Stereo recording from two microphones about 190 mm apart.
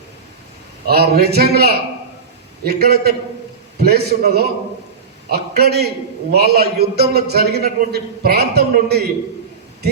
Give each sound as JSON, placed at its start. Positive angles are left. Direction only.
{"t": 0.9, "sound": "a man's voice", "side_deg": -55}